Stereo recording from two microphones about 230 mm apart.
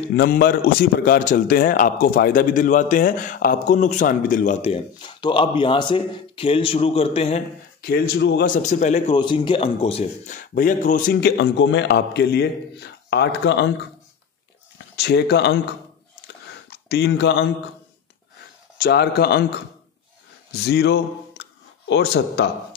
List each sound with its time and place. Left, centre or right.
0.1 s a man's voice: left
7.8 s a man's voice: left
15.0 s speech: left
16.7 s speech: left
18.8 s speech: left
20.6 s speech: left